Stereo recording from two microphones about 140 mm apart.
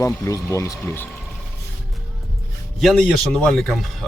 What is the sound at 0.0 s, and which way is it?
Speech, 25° left (ahead or behind).